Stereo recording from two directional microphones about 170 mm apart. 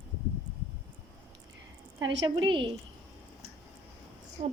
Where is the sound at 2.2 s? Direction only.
30° right (ahead or behind).